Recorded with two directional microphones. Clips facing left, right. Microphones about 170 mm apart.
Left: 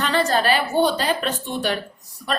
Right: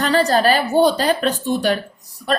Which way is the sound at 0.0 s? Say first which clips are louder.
Right 4 dB; 35° right (ahead or behind).